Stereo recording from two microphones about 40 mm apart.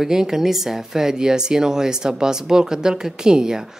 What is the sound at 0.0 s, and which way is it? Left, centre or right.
Speech, centre.